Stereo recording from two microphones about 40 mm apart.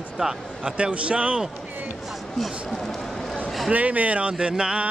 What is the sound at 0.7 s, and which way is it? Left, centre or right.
Speech, right.